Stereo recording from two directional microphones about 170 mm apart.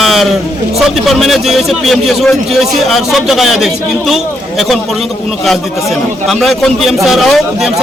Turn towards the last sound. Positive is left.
turn(degrees=0)  # may be behind; listen again after turning